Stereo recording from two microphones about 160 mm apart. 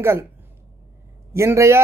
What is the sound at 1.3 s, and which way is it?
Speech, 15° right (ahead or behind).